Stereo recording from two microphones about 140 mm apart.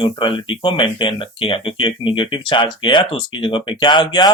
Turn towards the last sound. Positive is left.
turn(degrees=35)  # may be behind; listen again after turning